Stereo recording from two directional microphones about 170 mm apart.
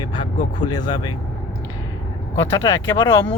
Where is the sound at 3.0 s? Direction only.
15° left (ahead or behind).